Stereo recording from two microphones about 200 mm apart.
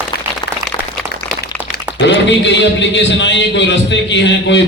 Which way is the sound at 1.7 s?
60° left (ahead or behind).